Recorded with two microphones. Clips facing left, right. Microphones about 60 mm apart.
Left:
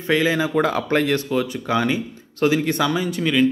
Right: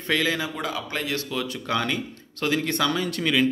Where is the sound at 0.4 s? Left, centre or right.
Left.